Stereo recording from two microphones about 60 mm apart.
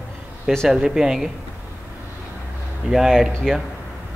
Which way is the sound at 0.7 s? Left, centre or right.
Centre.